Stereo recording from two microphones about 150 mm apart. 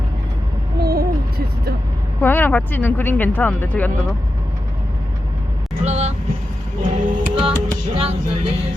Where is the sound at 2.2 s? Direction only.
15° left (ahead or behind).